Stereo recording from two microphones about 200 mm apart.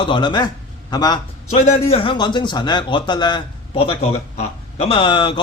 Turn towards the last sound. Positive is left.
turn(degrees=25)  # may be behind; listen again after turning